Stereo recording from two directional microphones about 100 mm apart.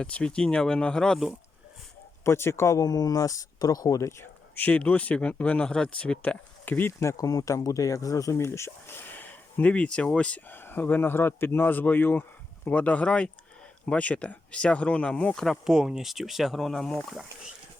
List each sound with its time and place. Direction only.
0.0 s speech: 10° left (ahead or behind)
2.2 s speech: 25° left (ahead or behind)
4.5 s speech: 15° left (ahead or behind)